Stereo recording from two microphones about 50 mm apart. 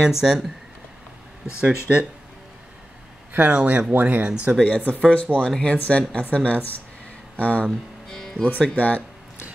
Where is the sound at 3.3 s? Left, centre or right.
Right.